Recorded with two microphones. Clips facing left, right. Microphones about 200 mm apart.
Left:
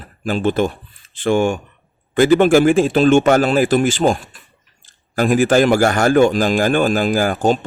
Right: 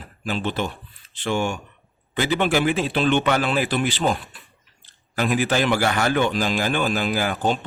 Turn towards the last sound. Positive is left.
turn(degrees=45)  # may be behind; listen again after turning